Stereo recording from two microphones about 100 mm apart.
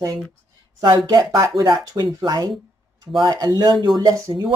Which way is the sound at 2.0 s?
50° right (ahead or behind).